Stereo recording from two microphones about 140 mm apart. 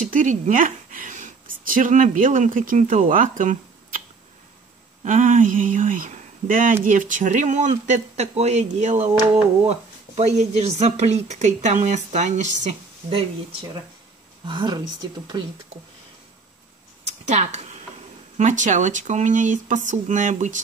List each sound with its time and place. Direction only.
0.0 s speech: 65° right (ahead or behind)
5.0 s speech: 65° right (ahead or behind)
14.5 s speech: 35° right (ahead or behind)
17.0 s a sound: 55° right (ahead or behind)
18.4 s speech: 65° right (ahead or behind)